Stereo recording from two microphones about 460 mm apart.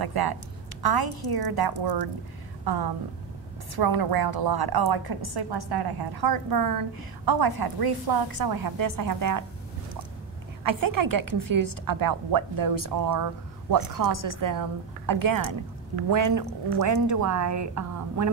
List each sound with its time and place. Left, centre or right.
0.0 s a sound: right
0.8 s a woman's voice: right
10.6 s a woman's voice: right